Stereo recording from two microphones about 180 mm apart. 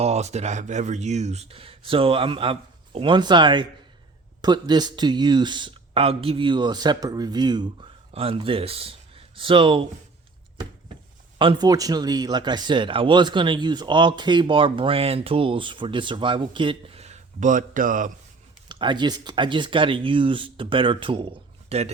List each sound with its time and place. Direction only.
0.0 s speech: 35° right (ahead or behind)
11.3 s speech: 25° right (ahead or behind); by 18.1 s 45° right (ahead or behind)
18.7 s speech: 25° right (ahead or behind)